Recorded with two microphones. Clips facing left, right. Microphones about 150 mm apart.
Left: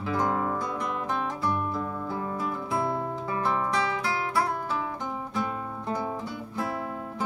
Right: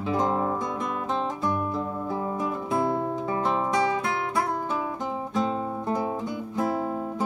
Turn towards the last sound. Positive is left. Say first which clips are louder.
# right 4 dB
turn(degrees=-20)  # may be behind; listen again after turning